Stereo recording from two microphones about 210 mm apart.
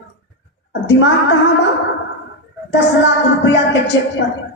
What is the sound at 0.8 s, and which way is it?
Speech, 60° left (ahead or behind).